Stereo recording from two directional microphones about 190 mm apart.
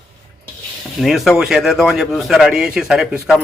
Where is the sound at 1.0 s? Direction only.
Centre (ahead or behind).